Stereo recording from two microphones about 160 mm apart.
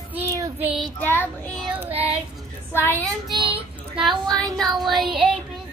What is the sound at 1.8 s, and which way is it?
Child singing, 40° right (ahead or behind).